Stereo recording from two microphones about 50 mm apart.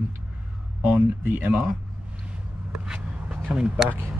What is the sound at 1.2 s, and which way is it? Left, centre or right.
Speech, right.